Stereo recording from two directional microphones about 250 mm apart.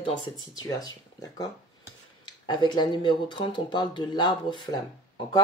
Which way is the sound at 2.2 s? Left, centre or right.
Centre.